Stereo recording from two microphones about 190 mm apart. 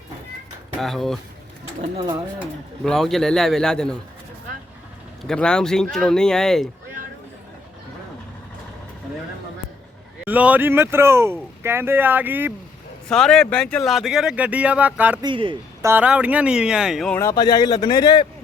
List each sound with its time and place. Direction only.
0.8 s speech: centre (ahead or behind)
2.8 s speech: centre (ahead or behind)
5.2 s speech: 5° left (ahead or behind)
10.2 s speech: 10° right (ahead or behind)
13.1 s speech: 5° left (ahead or behind)
15.2 s a man's voice: 25° right (ahead or behind)
15.8 s speech: 10° right (ahead or behind)
17.2 s speech: 20° left (ahead or behind)